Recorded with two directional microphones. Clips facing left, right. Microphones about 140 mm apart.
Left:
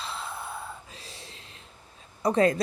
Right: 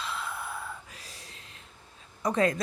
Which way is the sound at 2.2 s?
30° left (ahead or behind).